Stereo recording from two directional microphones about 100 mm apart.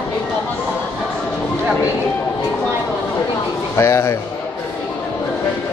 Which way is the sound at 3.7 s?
25° left (ahead or behind).